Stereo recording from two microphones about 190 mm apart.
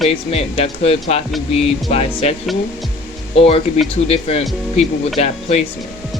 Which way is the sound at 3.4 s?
30° left (ahead or behind).